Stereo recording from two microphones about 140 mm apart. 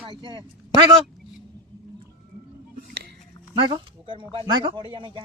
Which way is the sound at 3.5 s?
35° right (ahead or behind).